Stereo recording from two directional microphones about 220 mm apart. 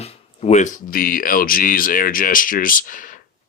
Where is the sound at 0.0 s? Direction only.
25° left (ahead or behind).